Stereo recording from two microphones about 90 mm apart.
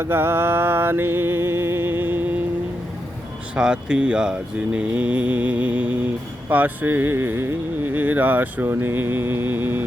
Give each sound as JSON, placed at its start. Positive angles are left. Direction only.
{"t": 0.0, "sound": "music", "side_deg": -25}
{"t": 3.5, "sound": "speech", "side_deg": -10}
{"t": 6.5, "sound": "music", "side_deg": -20}